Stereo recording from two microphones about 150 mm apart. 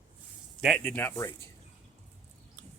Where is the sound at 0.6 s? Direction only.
Centre (ahead or behind).